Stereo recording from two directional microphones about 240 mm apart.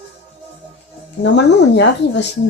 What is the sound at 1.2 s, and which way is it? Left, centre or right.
A man's voice, left.